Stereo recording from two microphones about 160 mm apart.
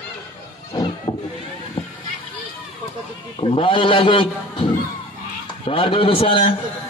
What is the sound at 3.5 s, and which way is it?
A man's voice, 30° left (ahead or behind).